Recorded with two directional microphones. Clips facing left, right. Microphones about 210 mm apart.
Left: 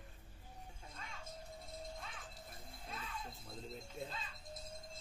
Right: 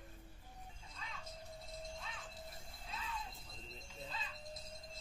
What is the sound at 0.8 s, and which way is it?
Music, 55° left (ahead or behind).